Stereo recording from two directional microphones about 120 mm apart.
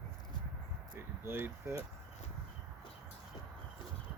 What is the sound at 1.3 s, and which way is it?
Speech, 20° right (ahead or behind).